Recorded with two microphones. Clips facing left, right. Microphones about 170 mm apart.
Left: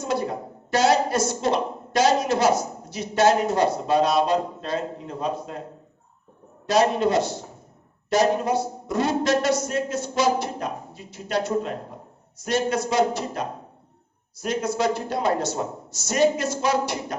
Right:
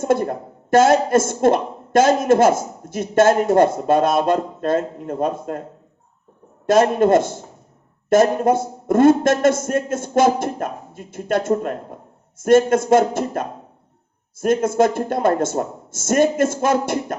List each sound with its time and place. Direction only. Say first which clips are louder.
0.0 s speech: right 7 dB; 50° right (ahead or behind)
6.7 s speech: right 6 dB; 50° right (ahead or behind)